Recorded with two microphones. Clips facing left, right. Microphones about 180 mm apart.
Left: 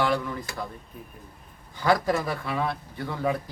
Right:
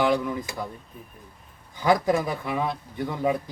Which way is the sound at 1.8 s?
15° right (ahead or behind).